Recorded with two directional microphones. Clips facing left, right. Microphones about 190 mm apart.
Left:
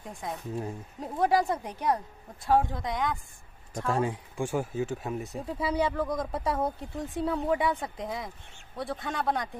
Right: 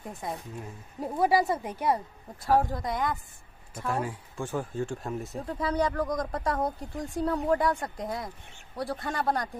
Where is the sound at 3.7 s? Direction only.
30° left (ahead or behind).